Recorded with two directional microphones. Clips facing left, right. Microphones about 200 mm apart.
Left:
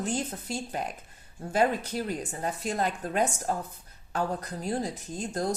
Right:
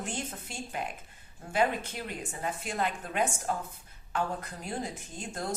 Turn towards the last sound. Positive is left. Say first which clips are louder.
# left 6 dB
turn(degrees=40)  # may be behind; listen again after turning